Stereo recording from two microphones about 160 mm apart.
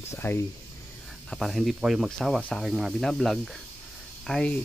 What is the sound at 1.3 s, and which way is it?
Speech, centre (ahead or behind).